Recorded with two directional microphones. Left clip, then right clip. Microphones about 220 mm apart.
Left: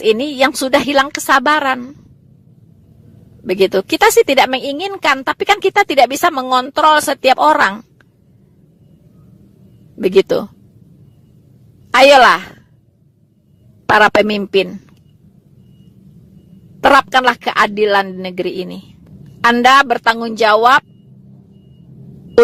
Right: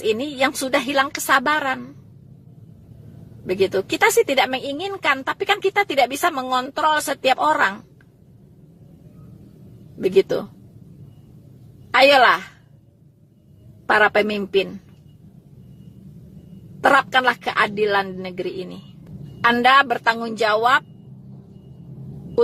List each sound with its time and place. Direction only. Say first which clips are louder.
0.0 s a woman's voice: left 7 dB; 45° left (ahead or behind)
3.4 s a woman's voice: left 6 dB; 45° left (ahead or behind)
10.0 s a woman's voice: left 6 dB; 45° left (ahead or behind)
11.9 s a woman's voice: left 6 dB; 45° left (ahead or behind)
13.9 s a woman's voice: left 6 dB; 45° left (ahead or behind)
16.8 s a woman's voice: left 6 dB; 45° left (ahead or behind)